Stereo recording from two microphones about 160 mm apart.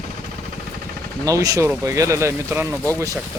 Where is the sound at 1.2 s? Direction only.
20° right (ahead or behind).